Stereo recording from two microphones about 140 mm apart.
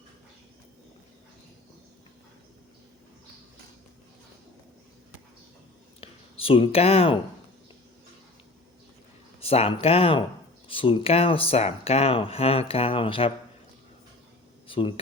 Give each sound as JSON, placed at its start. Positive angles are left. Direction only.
{"t": 6.0, "sound": "a sound", "side_deg": 40}
{"t": 9.4, "sound": "speech", "side_deg": 45}
{"t": 14.7, "sound": "speech", "side_deg": 40}